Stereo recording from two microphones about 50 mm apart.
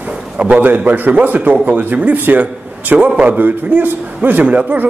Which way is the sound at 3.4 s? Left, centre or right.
Right.